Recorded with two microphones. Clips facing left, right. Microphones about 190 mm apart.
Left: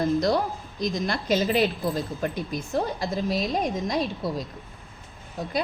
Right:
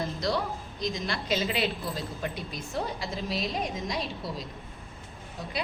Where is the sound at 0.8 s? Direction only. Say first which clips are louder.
Left 6 dB; 45° left (ahead or behind).